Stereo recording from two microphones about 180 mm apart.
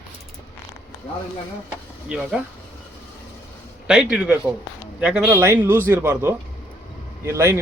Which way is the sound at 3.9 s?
5° right (ahead or behind).